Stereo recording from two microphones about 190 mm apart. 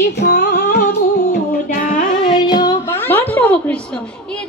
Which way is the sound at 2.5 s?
20° left (ahead or behind).